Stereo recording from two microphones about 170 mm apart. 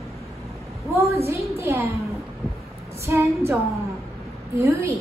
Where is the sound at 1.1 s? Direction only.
15° right (ahead or behind).